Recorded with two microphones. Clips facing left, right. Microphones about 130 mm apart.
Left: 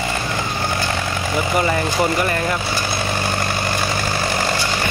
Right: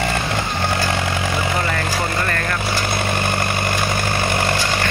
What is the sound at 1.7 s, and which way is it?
Speech, 15° left (ahead or behind).